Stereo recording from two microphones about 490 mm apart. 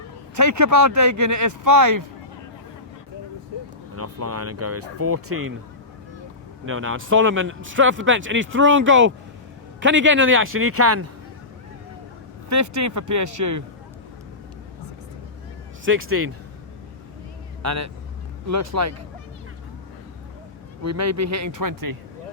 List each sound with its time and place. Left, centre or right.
0.3 s speech: right
3.9 s speech: right
6.7 s speech: right
12.5 s speech: right
15.8 s speech: right
17.6 s speech: right
20.8 s speech: right